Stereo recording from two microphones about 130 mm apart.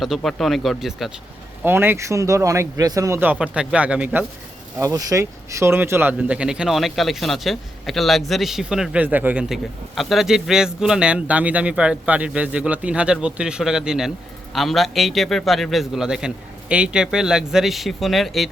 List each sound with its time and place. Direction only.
0.0 s a man's voice: centre (ahead or behind)
1.6 s speech: 15° right (ahead or behind)
3.2 s speech: 10° right (ahead or behind)
4.8 s a man's voice: 25° right (ahead or behind); by 18.4 s centre (ahead or behind)